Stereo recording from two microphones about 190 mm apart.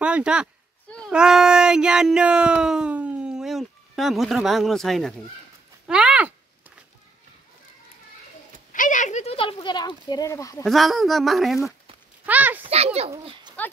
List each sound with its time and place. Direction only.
0.0 s speech: 5° right (ahead or behind)
5.9 s a sound: 5° right (ahead or behind)
8.7 s speech: 40° left (ahead or behind); by 10.6 s 15° left (ahead or behind)
10.6 s speech: centre (ahead or behind)
12.6 s a child's voice: 35° right (ahead or behind)
13.2 s a sound: 25° right (ahead or behind)